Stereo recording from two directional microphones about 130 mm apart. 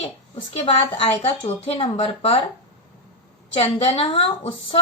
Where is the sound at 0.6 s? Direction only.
45° left (ahead or behind).